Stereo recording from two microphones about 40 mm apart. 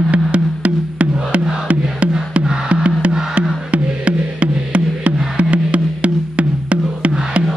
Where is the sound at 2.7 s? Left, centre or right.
Right.